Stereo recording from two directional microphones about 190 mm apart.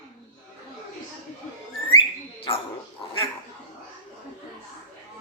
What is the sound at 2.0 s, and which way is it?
Bird, 30° left (ahead or behind).